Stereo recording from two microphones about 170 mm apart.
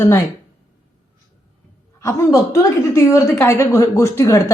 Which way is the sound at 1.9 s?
15° left (ahead or behind).